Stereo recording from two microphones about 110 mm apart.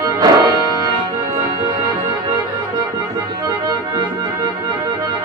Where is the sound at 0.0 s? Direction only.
35° right (ahead or behind).